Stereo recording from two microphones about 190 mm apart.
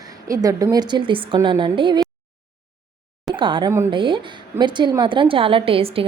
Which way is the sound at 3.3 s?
25° right (ahead or behind).